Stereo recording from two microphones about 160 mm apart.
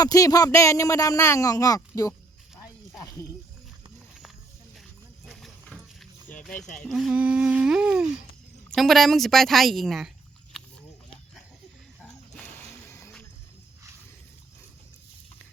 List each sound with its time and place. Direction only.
0.0 s speech: 20° left (ahead or behind)
5.2 s a sound: centre (ahead or behind)
6.7 s a woman's voice: centre (ahead or behind)
12.0 s music: 10° left (ahead or behind)